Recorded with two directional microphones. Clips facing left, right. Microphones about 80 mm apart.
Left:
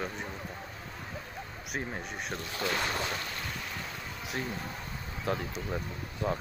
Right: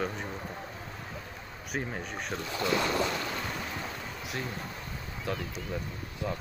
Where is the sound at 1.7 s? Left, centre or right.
Centre.